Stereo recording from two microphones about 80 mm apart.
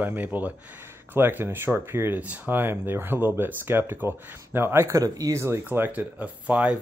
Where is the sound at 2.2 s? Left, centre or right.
Centre.